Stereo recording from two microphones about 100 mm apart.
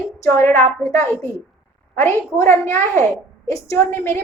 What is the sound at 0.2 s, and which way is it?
A woman's voice, 30° left (ahead or behind).